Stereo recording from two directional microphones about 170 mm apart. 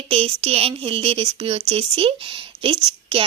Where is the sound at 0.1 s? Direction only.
35° right (ahead or behind).